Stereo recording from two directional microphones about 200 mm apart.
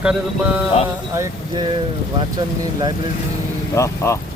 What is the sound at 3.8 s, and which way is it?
Speech, 15° left (ahead or behind).